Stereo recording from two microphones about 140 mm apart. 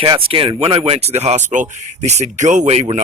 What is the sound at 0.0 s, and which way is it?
Speech, 40° right (ahead or behind).